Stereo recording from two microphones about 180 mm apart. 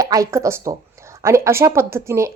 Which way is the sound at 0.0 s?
20° right (ahead or behind).